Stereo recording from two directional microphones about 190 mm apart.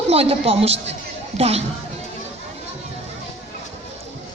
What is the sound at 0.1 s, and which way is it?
A woman's voice, 30° right (ahead or behind).